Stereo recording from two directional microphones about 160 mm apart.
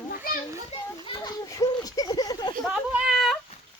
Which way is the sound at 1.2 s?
25° left (ahead or behind).